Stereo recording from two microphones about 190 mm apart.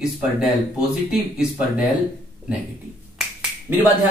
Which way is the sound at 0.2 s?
5° right (ahead or behind).